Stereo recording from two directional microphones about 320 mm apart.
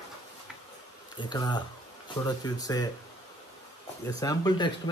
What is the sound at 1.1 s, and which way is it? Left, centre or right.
Speech, centre.